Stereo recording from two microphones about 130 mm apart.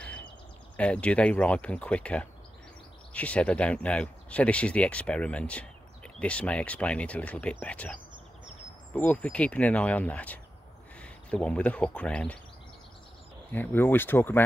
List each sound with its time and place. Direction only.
0.7 s speech: 10° left (ahead or behind)
13.5 s speech: 15° left (ahead or behind)